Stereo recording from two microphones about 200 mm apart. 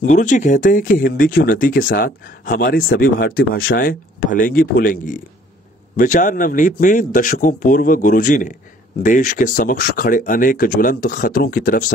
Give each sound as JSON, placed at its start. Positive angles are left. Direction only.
{"t": 0.0, "sound": "speech", "side_deg": 40}